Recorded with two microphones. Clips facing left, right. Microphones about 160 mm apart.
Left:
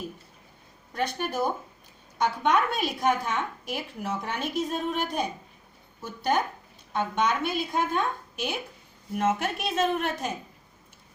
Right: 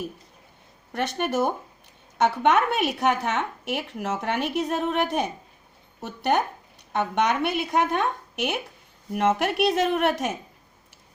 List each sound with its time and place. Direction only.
0.9 s a woman's voice: 70° right (ahead or behind)